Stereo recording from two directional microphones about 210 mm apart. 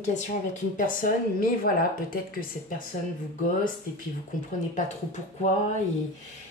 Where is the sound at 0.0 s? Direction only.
35° left (ahead or behind).